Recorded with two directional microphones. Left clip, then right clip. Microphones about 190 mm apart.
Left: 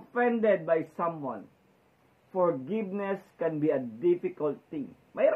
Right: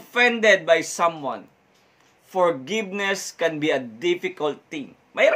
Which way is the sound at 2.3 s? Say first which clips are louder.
Right 7 dB; 45° right (ahead or behind).